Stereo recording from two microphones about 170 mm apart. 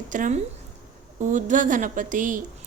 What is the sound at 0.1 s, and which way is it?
Speech, 50° right (ahead or behind).